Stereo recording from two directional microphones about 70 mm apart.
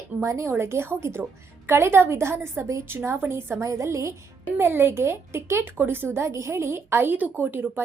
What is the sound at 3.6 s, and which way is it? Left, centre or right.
Speech, right.